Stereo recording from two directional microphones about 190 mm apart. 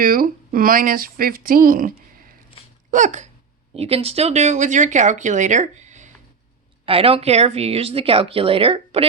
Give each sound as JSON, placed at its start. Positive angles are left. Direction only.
{"t": 0.0, "sound": "speech", "side_deg": -50}
{"t": 2.9, "sound": "speech", "side_deg": -40}